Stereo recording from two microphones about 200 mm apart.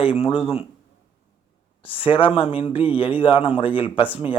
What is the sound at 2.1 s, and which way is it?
Speech, 25° left (ahead or behind).